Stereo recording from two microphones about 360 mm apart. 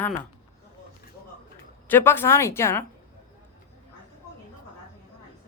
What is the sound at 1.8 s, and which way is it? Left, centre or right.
A woman's voice, centre.